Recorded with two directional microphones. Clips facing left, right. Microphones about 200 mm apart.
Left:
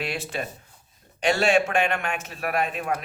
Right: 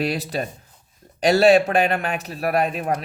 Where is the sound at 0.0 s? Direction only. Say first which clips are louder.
Right 6 dB; 35° right (ahead or behind).